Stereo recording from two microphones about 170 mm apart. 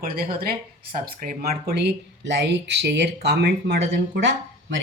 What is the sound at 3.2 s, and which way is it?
Speech, 70° right (ahead or behind).